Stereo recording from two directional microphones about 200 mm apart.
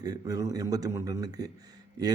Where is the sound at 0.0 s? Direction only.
20° right (ahead or behind).